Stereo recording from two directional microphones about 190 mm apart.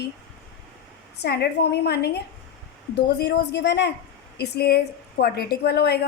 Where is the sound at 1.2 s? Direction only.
60° left (ahead or behind).